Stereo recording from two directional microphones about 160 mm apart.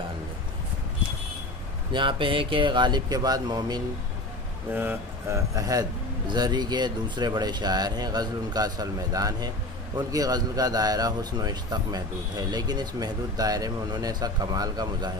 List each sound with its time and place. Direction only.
1.9 s a man's voice: 30° right (ahead or behind)
4.7 s a man's voice: 15° right (ahead or behind)